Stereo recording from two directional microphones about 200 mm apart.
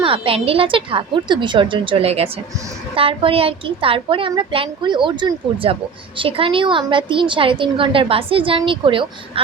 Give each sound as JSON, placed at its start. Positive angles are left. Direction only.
{"t": 0.0, "sound": "a woman's voice", "side_deg": -25}